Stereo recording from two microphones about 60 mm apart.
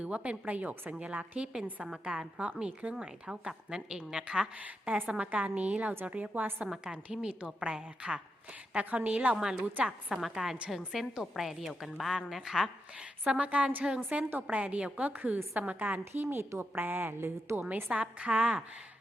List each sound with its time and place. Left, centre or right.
0.0 s a woman's voice: right
6.7 s a woman's voice: centre
9.3 s a woman's voice: centre
10.1 s a woman's voice: centre
13.0 s a woman's voice: centre
16.1 s a woman's voice: right
17.7 s a woman's voice: right